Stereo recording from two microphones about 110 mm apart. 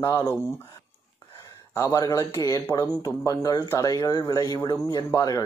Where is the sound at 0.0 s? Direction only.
35° left (ahead or behind).